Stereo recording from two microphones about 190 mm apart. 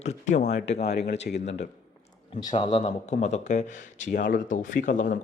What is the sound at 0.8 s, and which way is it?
Speech, 65° left (ahead or behind).